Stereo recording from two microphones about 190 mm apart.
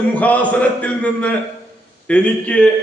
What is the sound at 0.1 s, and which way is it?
A man's voice, 10° left (ahead or behind).